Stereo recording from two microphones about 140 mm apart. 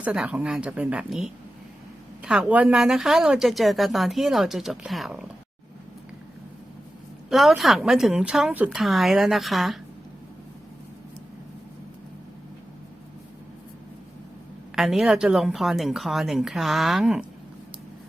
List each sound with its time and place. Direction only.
0.0 s a woman's voice: 10° right (ahead or behind)
7.3 s a woman's voice: centre (ahead or behind)
14.8 s a woman's voice: 5° right (ahead or behind)